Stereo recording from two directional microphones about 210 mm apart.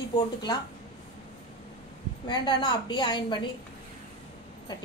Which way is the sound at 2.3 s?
20° left (ahead or behind).